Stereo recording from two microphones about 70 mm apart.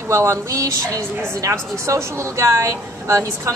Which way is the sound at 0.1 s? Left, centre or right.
Right.